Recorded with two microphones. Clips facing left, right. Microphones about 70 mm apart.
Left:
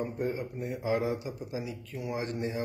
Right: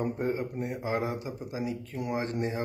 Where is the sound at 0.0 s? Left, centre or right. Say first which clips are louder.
Right 2 dB; right.